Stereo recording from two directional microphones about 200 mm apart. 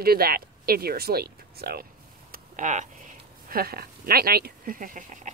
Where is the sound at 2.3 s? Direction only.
40° right (ahead or behind).